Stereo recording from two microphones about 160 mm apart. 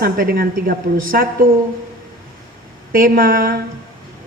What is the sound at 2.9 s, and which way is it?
Speech, 65° right (ahead or behind).